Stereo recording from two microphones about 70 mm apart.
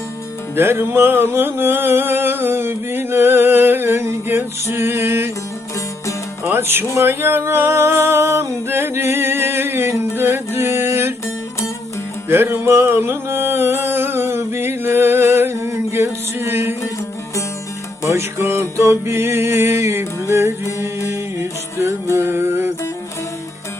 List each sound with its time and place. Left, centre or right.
0.5 s music: right
6.4 s music: right
12.3 s music: right
18.1 s music: right
22.1 s mantra: right